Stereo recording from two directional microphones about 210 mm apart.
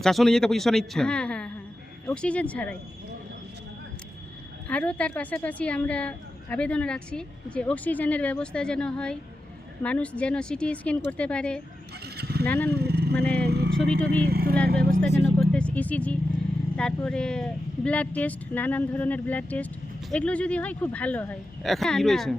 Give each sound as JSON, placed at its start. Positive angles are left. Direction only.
{"t": 0.0, "sound": "a woman's voice", "side_deg": 0}
{"t": 4.7, "sound": "a woman's voice", "side_deg": 5}
{"t": 12.0, "sound": "pulleys", "side_deg": -50}
{"t": 12.5, "sound": "a woman's voice", "side_deg": 10}
{"t": 12.7, "sound": "speech", "side_deg": -50}
{"t": 14.8, "sound": "speech", "side_deg": 5}
{"t": 15.4, "sound": "vehicle", "side_deg": 5}
{"t": 16.7, "sound": "a woman's voice", "side_deg": 5}